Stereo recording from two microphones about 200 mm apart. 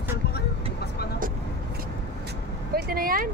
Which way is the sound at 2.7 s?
50° right (ahead or behind).